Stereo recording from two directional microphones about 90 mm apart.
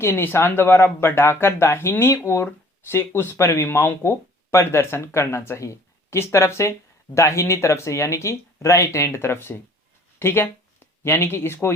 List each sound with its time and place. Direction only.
0.0 s speech: 25° left (ahead or behind)